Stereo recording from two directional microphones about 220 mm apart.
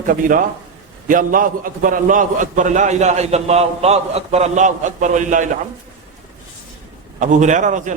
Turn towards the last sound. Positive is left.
turn(degrees=-35)  # may be behind; listen again after turning